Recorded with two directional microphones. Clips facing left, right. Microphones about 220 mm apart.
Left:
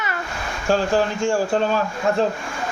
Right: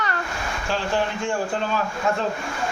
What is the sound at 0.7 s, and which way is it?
Speech, 45° left (ahead or behind).